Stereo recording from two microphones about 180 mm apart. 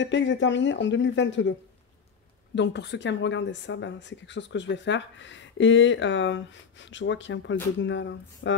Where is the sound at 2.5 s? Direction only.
75° left (ahead or behind).